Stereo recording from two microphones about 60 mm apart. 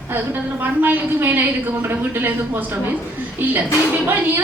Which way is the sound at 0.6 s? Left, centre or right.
Right.